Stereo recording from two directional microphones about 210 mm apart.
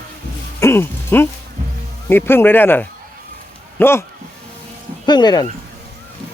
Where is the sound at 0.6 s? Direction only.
10° left (ahead or behind).